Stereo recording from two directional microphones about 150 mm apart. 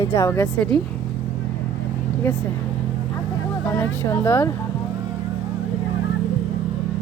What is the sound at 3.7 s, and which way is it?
Speech, 15° left (ahead or behind).